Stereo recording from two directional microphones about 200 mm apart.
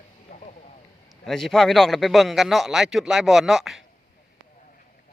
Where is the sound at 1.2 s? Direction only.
Centre (ahead or behind).